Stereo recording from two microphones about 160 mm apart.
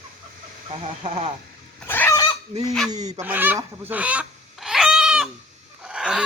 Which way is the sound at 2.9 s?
45° right (ahead or behind).